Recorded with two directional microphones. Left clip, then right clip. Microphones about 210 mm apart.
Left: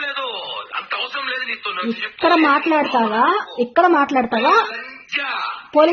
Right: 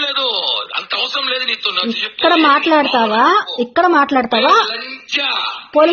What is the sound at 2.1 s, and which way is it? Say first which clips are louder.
A woman's voice: right 3 dB; 10° right (ahead or behind).